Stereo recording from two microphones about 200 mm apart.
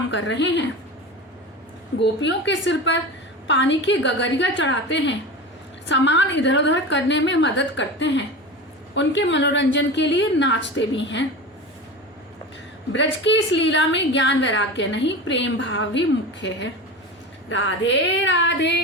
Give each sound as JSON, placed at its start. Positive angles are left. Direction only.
{"t": 0.1, "sound": "a woman's voice", "side_deg": 65}
{"t": 2.0, "sound": "a woman's voice", "side_deg": 65}
{"t": 12.9, "sound": "a woman's voice", "side_deg": 65}